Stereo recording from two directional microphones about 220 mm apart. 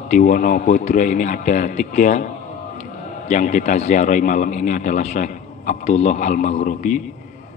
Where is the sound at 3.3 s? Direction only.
35° left (ahead or behind).